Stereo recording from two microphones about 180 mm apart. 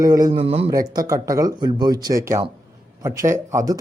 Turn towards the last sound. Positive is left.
turn(degrees=-15)  # may be behind; listen again after turning